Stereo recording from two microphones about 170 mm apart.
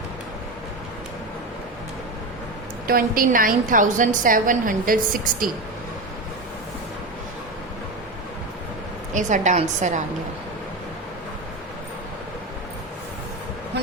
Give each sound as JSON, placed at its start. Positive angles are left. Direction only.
{"t": 2.8, "sound": "a woman's voice", "side_deg": -60}
{"t": 9.1, "sound": "a woman's voice", "side_deg": -45}